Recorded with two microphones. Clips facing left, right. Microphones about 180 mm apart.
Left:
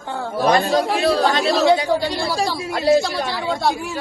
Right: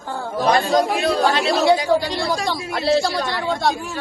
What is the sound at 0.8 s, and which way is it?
Speech, 30° left (ahead or behind).